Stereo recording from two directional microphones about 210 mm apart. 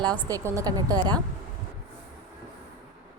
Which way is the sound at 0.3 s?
15° right (ahead or behind).